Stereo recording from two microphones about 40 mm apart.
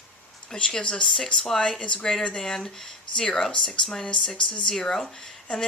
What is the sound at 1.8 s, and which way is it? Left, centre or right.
Speech, left.